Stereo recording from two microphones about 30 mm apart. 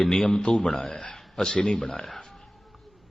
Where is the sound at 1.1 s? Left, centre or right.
Centre.